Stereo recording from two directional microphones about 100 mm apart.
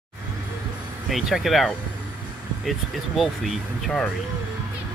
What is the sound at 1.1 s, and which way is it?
Speech, centre (ahead or behind).